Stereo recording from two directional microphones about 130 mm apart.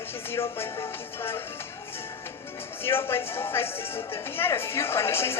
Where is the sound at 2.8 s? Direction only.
20° left (ahead or behind).